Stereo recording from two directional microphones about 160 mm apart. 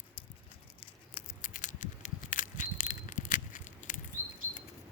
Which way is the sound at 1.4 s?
55° left (ahead or behind).